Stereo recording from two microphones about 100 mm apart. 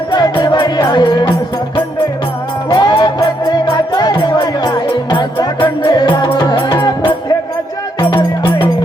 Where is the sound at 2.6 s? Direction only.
50° left (ahead or behind).